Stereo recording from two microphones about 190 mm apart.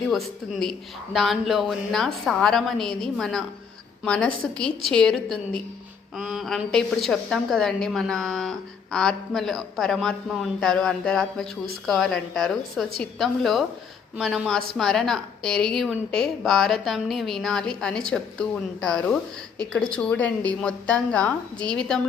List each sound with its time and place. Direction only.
0.1 s a woman's voice: centre (ahead or behind)